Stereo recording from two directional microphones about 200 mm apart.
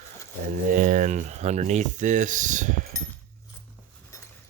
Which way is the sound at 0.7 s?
40° right (ahead or behind).